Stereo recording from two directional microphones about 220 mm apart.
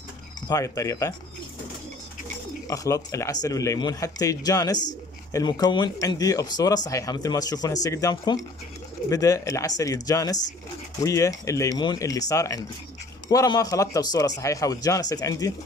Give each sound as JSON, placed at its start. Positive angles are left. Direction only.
{"t": 0.5, "sound": "speech", "side_deg": 15}
{"t": 2.7, "sound": "speech", "side_deg": 15}